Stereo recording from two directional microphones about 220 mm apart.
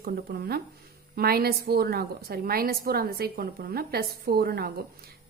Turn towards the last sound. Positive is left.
turn(degrees=-45)  # may be behind; listen again after turning